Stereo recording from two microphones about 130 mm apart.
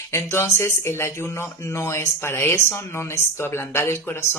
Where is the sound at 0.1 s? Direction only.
20° left (ahead or behind).